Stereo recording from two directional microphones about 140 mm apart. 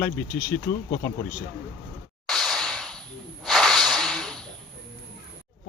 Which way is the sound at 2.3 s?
Centre (ahead or behind).